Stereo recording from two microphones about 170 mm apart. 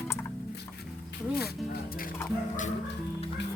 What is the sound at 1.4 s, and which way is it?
Speech, 65° left (ahead or behind).